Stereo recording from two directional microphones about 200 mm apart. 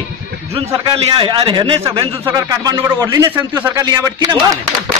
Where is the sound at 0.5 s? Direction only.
25° right (ahead or behind).